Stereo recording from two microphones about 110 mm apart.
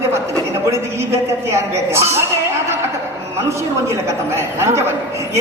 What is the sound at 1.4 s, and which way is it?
Speech, 25° right (ahead or behind).